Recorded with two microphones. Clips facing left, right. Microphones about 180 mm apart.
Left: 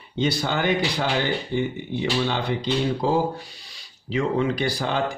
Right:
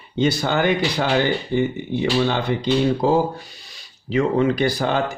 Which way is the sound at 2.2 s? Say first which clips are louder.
Right 4 dB; 50° right (ahead or behind).